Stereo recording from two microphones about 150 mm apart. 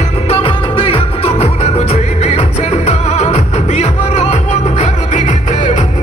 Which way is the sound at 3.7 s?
50° left (ahead or behind).